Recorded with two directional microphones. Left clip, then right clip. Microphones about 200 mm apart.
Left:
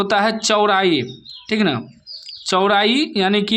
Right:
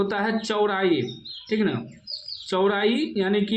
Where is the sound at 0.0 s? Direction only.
45° left (ahead or behind).